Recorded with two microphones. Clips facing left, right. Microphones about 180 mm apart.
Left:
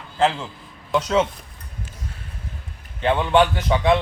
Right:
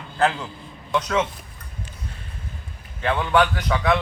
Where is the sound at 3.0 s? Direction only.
25° left (ahead or behind).